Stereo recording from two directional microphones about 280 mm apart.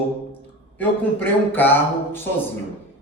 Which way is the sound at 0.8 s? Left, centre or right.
Centre.